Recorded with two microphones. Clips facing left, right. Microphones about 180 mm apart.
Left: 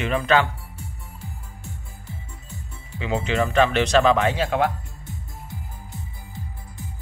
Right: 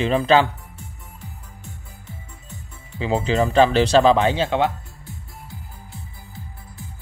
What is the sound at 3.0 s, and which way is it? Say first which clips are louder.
Speech: right 3 dB; 35° right (ahead or behind).